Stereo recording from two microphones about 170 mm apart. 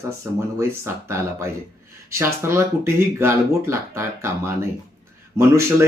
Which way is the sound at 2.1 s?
15° right (ahead or behind).